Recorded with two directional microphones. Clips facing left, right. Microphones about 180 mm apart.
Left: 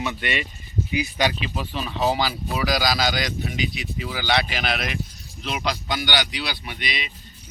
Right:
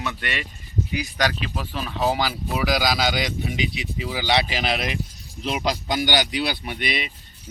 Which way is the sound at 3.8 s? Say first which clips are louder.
Right 2 dB; 20° right (ahead or behind).